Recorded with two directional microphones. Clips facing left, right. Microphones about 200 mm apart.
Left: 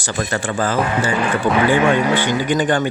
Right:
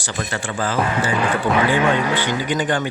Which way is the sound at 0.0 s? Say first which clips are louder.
Left 4 dB; 45° left (ahead or behind).